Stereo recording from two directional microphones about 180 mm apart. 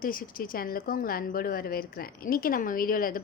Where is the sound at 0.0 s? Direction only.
50° left (ahead or behind).